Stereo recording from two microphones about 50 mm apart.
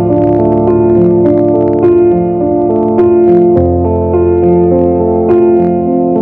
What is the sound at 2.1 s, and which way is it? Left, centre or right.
Music, centre.